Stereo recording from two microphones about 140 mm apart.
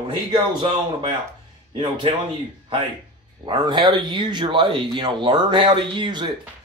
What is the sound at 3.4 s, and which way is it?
Speech, 35° right (ahead or behind).